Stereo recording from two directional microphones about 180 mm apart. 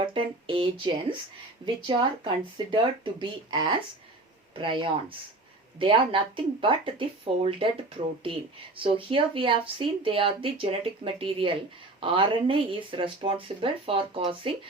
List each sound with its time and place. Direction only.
0.0 s speech: 25° right (ahead or behind)